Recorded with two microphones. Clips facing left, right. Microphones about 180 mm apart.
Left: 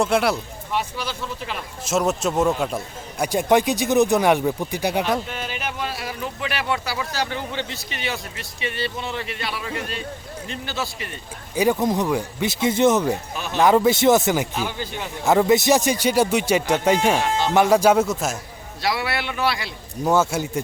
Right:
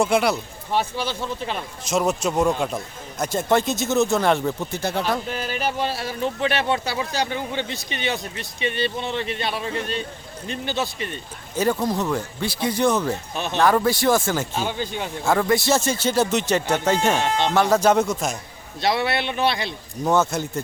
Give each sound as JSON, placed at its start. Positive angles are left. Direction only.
{"t": 0.0, "sound": "speech", "side_deg": 0}
{"t": 0.7, "sound": "speech", "side_deg": -30}
{"t": 1.9, "sound": "a man's voice", "side_deg": 0}
{"t": 5.5, "sound": "speech", "side_deg": -35}
{"t": 11.5, "sound": "a man's voice", "side_deg": 15}
{"t": 13.3, "sound": "speech", "side_deg": -25}
{"t": 13.6, "sound": "speech", "side_deg": 20}
{"t": 14.6, "sound": "speech", "side_deg": -20}
{"t": 15.2, "sound": "a man's voice", "side_deg": 20}
{"t": 18.8, "sound": "speech", "side_deg": -25}
{"t": 20.1, "sound": "a man's voice", "side_deg": 10}